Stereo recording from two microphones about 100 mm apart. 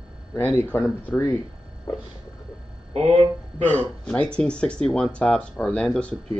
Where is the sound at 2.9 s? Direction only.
80° right.